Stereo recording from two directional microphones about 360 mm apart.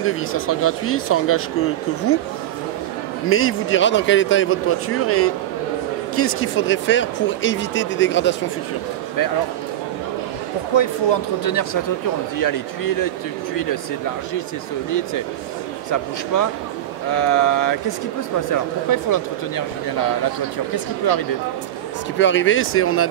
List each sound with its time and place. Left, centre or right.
0.0 s speech: left
3.3 s speech: left
11.4 s speech: left
16.3 s speech: left
20.7 s speech: left
22.2 s speech: left